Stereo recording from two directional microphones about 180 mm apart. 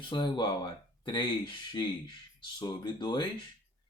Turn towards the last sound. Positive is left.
turn(degrees=25)  # may be behind; listen again after turning